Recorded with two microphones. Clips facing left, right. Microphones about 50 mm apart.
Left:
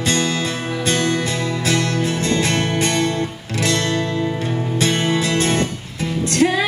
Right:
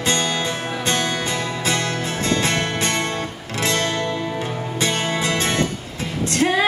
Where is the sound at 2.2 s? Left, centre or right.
Right.